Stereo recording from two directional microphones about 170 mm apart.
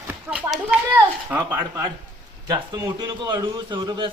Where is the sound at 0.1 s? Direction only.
5° right (ahead or behind).